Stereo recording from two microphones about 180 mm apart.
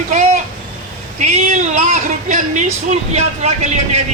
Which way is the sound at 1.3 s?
40° right (ahead or behind).